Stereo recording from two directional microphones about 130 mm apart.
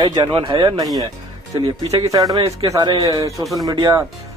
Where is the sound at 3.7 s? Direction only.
30° right (ahead or behind).